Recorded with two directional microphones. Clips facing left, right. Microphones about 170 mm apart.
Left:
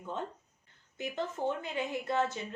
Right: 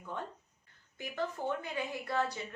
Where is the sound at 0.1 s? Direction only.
20° left (ahead or behind).